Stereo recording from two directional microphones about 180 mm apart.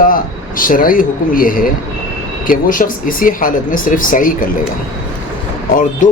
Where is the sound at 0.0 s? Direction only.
50° left (ahead or behind).